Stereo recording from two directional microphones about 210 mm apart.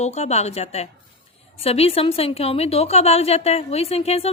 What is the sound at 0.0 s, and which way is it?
A woman's voice, 30° left (ahead or behind).